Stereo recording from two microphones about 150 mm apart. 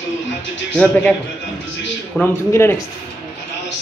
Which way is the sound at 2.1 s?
15° left (ahead or behind).